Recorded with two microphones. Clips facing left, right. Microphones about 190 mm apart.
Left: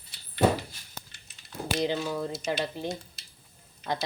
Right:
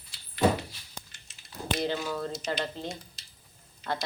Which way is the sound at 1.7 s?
15° left (ahead or behind).